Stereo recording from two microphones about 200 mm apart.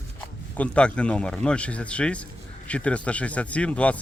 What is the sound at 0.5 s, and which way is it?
Speech, 5° left (ahead or behind).